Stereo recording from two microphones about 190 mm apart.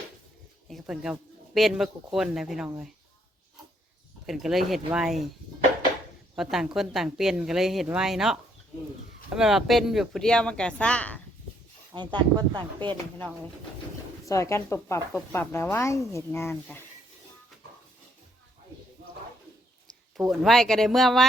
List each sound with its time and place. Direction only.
0.7 s speech: 5° right (ahead or behind)
4.3 s speech: centre (ahead or behind)
6.3 s speech: centre (ahead or behind)
11.9 s speech: 25° right (ahead or behind)
14.3 s speech: 15° left (ahead or behind)
20.3 s speech: centre (ahead or behind)